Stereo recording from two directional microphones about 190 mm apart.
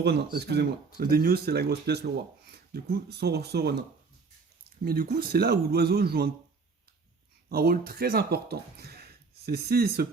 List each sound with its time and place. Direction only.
0.0 s speech: 60° right (ahead or behind)
7.5 s speech: 50° right (ahead or behind)